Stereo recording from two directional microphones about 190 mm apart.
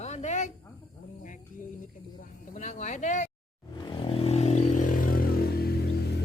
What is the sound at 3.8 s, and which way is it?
Vehicle, 30° left (ahead or behind).